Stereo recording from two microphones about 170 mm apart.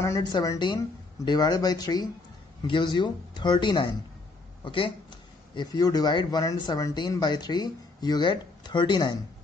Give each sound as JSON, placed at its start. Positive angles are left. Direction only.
{"t": 0.0, "sound": "speech", "side_deg": 20}